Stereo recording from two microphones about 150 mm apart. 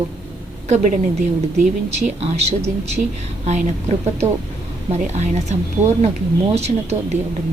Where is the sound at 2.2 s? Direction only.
45° right (ahead or behind).